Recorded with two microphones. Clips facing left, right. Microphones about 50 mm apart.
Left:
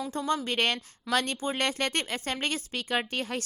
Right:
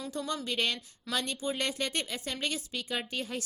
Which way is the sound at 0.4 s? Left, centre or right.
Left.